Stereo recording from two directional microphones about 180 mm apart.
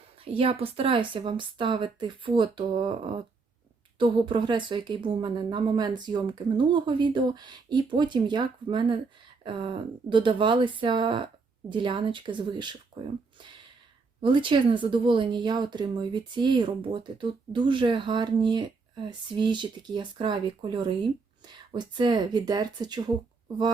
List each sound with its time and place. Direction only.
0.3 s speech: 30° right (ahead or behind)
14.2 s speech: 25° right (ahead or behind)